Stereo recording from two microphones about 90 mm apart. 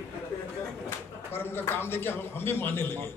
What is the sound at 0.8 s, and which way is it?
A man's voice, 25° left (ahead or behind).